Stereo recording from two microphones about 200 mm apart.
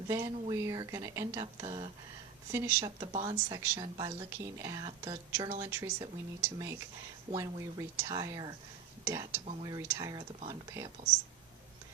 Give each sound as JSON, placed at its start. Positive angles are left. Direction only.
{"t": 0.1, "sound": "speech", "side_deg": -15}